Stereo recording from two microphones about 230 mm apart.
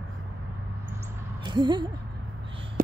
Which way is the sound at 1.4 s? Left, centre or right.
Centre.